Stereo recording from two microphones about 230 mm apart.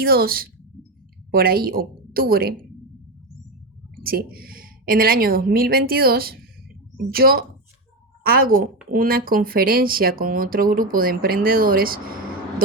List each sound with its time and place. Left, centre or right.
0.0 s speech: right
4.0 s speech: right